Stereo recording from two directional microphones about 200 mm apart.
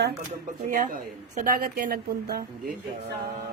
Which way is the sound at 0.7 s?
45° right (ahead or behind).